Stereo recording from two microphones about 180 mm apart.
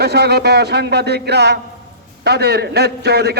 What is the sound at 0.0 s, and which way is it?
A man's voice, 65° right (ahead or behind).